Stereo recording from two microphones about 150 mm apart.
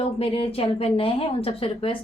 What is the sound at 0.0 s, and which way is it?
A woman's voice, 40° left (ahead or behind).